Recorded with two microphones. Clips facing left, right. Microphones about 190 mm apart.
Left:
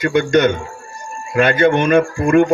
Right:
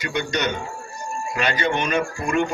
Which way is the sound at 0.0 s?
50° left (ahead or behind).